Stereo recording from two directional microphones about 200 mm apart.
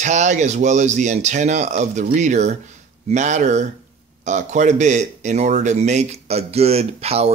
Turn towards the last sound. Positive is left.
turn(degrees=-30)  # may be behind; listen again after turning